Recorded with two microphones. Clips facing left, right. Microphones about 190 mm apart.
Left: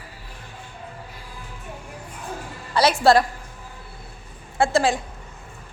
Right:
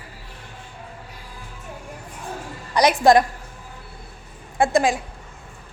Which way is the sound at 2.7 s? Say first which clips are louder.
Right 2 dB; 15° right (ahead or behind).